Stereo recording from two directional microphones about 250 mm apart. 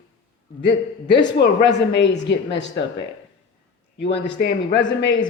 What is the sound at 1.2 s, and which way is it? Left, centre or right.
Speech, left.